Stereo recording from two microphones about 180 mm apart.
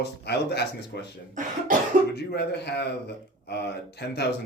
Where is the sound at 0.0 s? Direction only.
65° left (ahead or behind).